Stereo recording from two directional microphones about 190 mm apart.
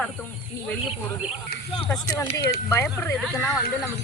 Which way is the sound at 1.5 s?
55° left (ahead or behind).